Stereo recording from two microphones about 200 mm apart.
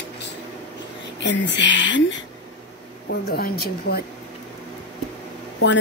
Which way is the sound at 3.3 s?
50° left (ahead or behind).